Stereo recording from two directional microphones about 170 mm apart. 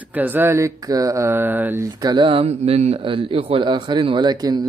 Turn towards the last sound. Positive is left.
turn(degrees=-25)  # may be behind; listen again after turning